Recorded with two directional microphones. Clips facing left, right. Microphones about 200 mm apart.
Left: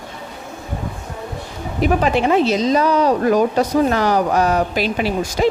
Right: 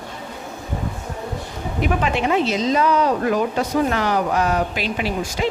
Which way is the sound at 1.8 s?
40° left (ahead or behind).